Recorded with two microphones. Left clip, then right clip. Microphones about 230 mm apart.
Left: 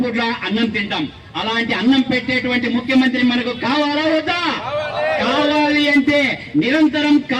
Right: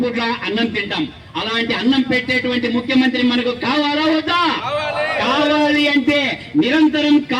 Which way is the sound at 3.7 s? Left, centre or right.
Right.